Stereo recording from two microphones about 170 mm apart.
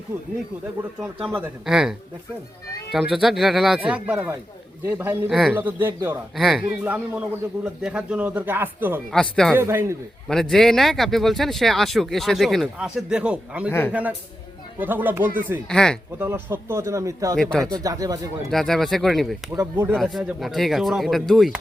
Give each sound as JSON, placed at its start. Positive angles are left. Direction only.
{"t": 1.4, "sound": "a man's voice", "side_deg": -5}
{"t": 6.3, "sound": "a man's voice", "side_deg": 0}
{"t": 9.1, "sound": "speech", "side_deg": 5}
{"t": 9.6, "sound": "a man's voice", "side_deg": -15}
{"t": 10.2, "sound": "speech", "side_deg": 0}
{"t": 13.7, "sound": "a man's voice", "side_deg": 15}
{"t": 14.8, "sound": "a man's voice", "side_deg": -10}
{"t": 15.7, "sound": "speech", "side_deg": 5}
{"t": 16.1, "sound": "a man's voice", "side_deg": -15}
{"t": 17.3, "sound": "speech", "side_deg": 5}
{"t": 17.6, "sound": "speech", "side_deg": -20}
{"t": 18.5, "sound": "speech", "side_deg": 0}
{"t": 19.5, "sound": "a man's voice", "side_deg": -15}
{"t": 20.0, "sound": "speech", "side_deg": 0}